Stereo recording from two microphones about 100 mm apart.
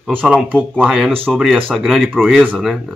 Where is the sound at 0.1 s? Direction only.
15° right (ahead or behind).